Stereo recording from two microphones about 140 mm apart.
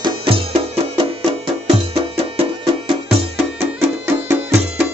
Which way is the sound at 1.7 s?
40° right (ahead or behind).